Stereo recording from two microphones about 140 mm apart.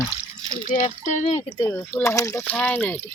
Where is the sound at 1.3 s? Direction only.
40° left (ahead or behind).